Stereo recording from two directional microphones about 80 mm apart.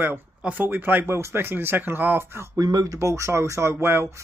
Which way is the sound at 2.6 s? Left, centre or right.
Right.